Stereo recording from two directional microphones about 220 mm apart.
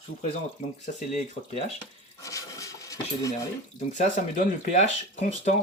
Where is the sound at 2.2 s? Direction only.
15° left (ahead or behind).